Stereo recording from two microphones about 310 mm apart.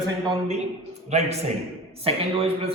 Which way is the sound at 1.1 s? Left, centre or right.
Right.